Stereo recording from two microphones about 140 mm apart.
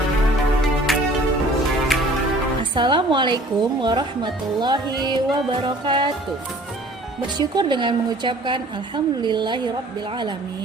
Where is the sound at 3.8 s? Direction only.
30° right (ahead or behind).